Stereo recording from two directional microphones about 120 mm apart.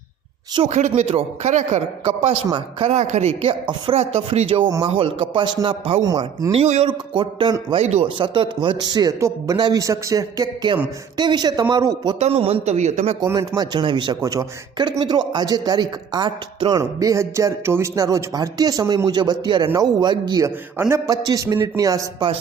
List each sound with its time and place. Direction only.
0.6 s speech: 80° right
1.0 s speech: 60° right (ahead or behind)
2.0 s speech: 55° right (ahead or behind)
6.0 s a man's voice: 30° right (ahead or behind)
6.5 s speech: 60° right (ahead or behind)
6.8 s a man's voice: 40° right (ahead or behind)
7.8 s speech: 65° right (ahead or behind)
8.0 s a man's voice: 45° right (ahead or behind)
12.2 s speech: 55° right (ahead or behind)
13.2 s a man's voice: 25° right (ahead or behind)
20.7 s a man's voice: 20° right (ahead or behind)
21.1 s a man's voice: 30° right (ahead or behind)